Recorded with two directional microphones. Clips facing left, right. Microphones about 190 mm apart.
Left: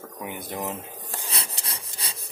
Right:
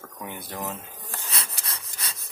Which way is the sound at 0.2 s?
15° left (ahead or behind).